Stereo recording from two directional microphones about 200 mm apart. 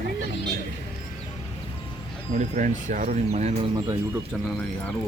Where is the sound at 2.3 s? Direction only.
40° right (ahead or behind).